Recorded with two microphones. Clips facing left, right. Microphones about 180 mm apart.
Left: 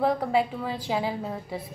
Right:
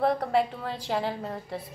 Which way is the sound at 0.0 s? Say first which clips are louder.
Left 1 dB; centre (ahead or behind).